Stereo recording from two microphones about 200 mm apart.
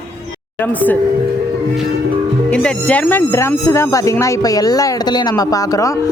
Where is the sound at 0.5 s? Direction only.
10° left (ahead or behind).